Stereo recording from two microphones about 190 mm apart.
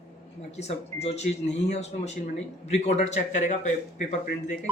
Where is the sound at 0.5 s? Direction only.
35° left (ahead or behind).